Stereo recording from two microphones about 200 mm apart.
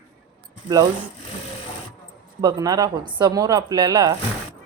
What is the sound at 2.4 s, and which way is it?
Speech, 20° right (ahead or behind).